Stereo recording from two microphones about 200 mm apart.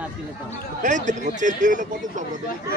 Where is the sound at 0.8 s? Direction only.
40° right (ahead or behind).